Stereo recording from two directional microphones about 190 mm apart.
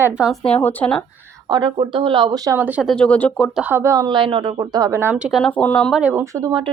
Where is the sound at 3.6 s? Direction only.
10° right (ahead or behind).